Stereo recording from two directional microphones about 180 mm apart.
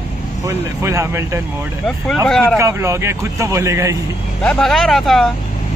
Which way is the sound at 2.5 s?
15° right (ahead or behind).